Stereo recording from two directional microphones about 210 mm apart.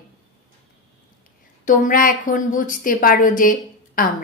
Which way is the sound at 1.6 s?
40° left (ahead or behind).